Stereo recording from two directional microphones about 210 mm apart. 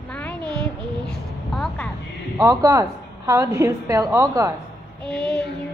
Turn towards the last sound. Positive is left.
turn(degrees=5)  # may be behind; listen again after turning